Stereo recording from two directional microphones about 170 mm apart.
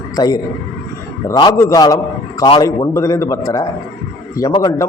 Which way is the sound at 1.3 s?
20° left (ahead or behind).